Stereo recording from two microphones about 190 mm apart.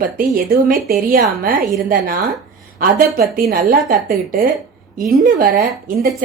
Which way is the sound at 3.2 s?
50° right (ahead or behind).